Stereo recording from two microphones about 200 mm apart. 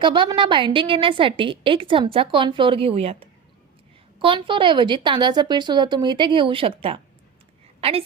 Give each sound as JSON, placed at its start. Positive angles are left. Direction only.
{"t": 0.0, "sound": "a woman's voice", "side_deg": -25}